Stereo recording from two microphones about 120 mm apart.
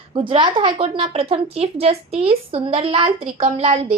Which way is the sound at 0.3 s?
45° right (ahead or behind).